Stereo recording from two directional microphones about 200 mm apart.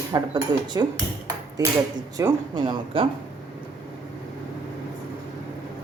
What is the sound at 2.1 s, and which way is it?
Speech, 20° right (ahead or behind).